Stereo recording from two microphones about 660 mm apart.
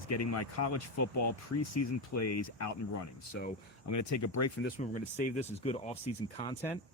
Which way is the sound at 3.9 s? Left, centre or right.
Left.